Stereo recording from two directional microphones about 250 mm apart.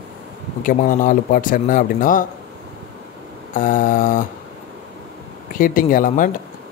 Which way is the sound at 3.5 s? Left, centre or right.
Left.